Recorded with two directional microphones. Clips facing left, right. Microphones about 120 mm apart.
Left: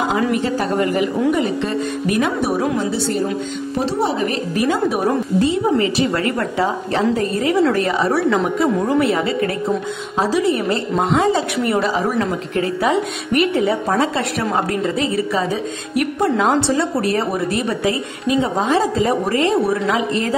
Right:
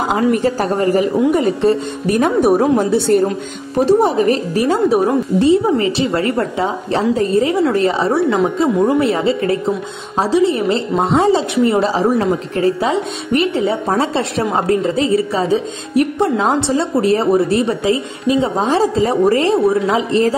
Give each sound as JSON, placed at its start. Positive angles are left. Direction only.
{"t": 0.1, "sound": "a woman's voice", "side_deg": -40}